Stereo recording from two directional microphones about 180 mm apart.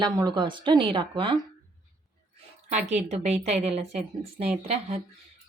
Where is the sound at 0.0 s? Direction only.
25° right (ahead or behind).